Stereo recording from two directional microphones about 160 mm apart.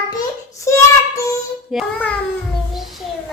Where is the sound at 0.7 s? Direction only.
20° left (ahead or behind).